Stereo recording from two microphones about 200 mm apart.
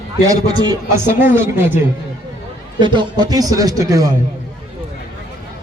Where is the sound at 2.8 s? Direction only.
25° right (ahead or behind).